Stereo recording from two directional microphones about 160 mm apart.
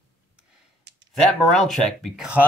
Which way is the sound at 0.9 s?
90° right.